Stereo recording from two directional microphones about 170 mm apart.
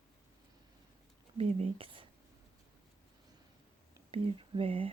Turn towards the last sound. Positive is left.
turn(degrees=-35)  # may be behind; listen again after turning